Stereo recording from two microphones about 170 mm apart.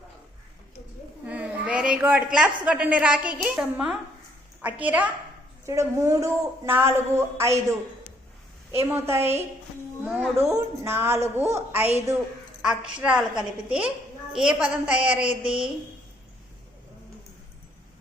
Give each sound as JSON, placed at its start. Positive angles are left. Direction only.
{"t": 1.3, "sound": "a woman's voice", "side_deg": -10}
{"t": 10.5, "sound": "a woman's voice", "side_deg": -15}
{"t": 15.3, "sound": "speech", "side_deg": -30}